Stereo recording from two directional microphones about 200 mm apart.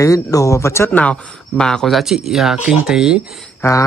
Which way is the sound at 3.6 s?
15° left (ahead or behind).